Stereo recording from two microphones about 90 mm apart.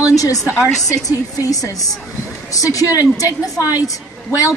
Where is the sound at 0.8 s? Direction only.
40° left (ahead or behind).